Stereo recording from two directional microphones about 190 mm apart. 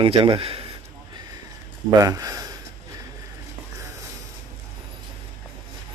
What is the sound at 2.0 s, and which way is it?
Speech, 15° right (ahead or behind).